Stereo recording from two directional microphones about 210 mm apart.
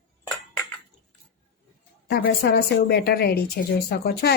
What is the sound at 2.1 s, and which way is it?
Speech, 45° left (ahead or behind).